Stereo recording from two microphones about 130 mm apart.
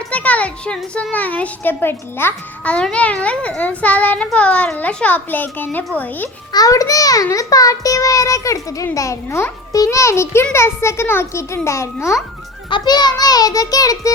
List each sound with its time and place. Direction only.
0.1 s a sound: 10° left (ahead or behind)
1.1 s a child's voice: 10° left (ahead or behind)
6.5 s a child's voice: 30° left (ahead or behind)
12.7 s a child's voice: 35° left (ahead or behind)